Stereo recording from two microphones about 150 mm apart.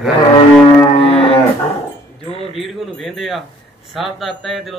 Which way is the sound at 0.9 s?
40° left (ahead or behind).